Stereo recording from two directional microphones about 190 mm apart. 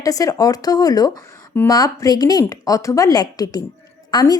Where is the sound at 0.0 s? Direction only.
20° left (ahead or behind).